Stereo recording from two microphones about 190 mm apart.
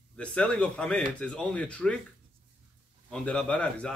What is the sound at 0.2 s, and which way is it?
A man's voice, 5° left (ahead or behind).